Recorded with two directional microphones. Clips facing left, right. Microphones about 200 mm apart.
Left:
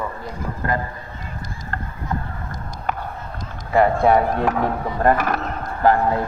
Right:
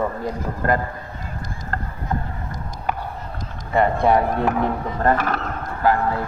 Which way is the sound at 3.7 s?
Centre (ahead or behind).